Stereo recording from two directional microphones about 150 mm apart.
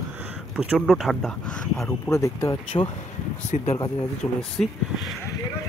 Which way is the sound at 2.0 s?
20° left (ahead or behind).